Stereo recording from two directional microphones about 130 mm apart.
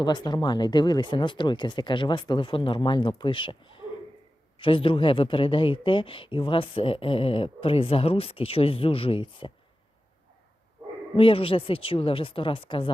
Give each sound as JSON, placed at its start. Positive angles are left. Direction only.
{"t": 0.0, "sound": "speech", "side_deg": 35}
{"t": 11.2, "sound": "speech", "side_deg": 45}